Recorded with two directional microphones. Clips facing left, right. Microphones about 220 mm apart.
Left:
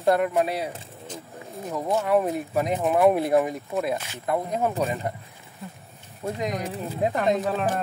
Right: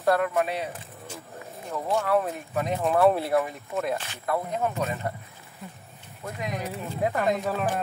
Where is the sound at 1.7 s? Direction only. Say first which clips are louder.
Left 2 dB; 20° left (ahead or behind).